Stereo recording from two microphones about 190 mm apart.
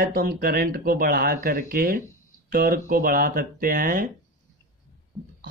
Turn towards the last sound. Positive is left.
turn(degrees=-5)  # may be behind; listen again after turning